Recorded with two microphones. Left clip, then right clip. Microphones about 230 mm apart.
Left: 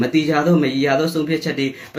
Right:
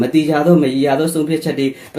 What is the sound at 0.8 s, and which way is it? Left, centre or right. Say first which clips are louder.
Speech: right 2 dB; centre.